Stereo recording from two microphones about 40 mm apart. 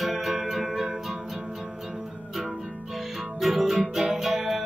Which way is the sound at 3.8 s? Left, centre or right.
Centre.